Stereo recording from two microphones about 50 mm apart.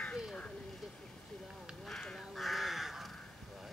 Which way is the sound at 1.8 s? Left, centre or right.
Centre.